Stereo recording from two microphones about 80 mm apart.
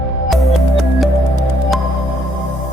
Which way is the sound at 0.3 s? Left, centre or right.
Centre.